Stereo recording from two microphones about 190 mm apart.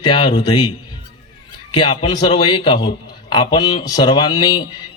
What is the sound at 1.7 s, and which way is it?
A man's voice, 25° left (ahead or behind).